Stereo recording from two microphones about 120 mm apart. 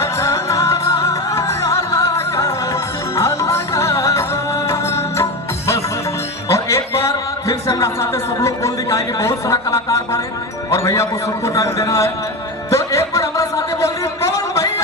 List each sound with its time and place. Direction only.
0.0 s music: 25° left (ahead or behind)
6.5 s a man's voice: 25° left (ahead or behind)
12.7 s a sound: 25° left (ahead or behind)